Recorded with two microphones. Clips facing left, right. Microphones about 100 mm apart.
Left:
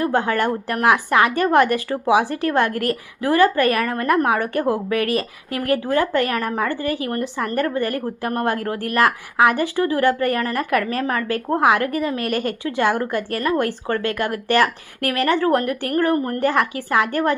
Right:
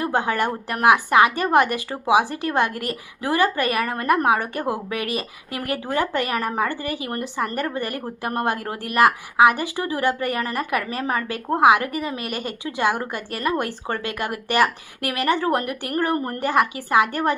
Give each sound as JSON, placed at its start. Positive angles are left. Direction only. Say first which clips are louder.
{"t": 0.0, "sound": "a woman's voice", "louder": "left 3 dB", "side_deg": -20}